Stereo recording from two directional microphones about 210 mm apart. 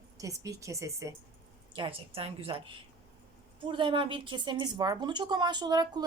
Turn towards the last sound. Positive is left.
turn(degrees=-20)  # may be behind; listen again after turning